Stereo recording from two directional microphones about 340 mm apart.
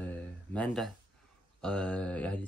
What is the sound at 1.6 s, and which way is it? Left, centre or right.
Speech, centre.